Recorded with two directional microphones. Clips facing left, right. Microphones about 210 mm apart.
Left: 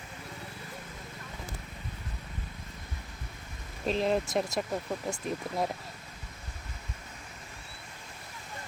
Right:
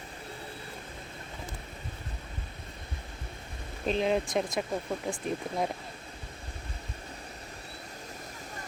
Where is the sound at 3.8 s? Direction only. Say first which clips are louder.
Right 1 dB; centre (ahead or behind).